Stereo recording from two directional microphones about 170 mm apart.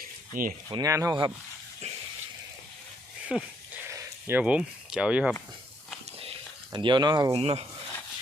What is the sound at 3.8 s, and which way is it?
Speech, 15° right (ahead or behind).